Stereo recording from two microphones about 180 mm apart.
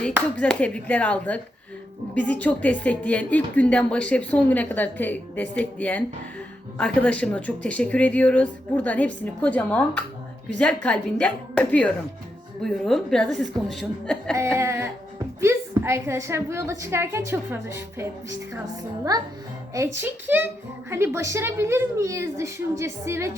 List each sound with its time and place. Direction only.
0.3 s a woman's voice: 5° left (ahead or behind)
14.3 s a woman's voice: 15° right (ahead or behind)
19.7 s a woman's voice: 15° right (ahead or behind)